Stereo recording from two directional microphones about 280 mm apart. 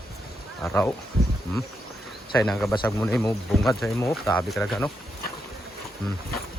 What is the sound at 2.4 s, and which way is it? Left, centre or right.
Speech, centre.